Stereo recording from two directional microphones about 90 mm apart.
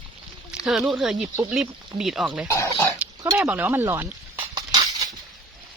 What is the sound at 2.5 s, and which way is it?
Speech, 35° left (ahead or behind).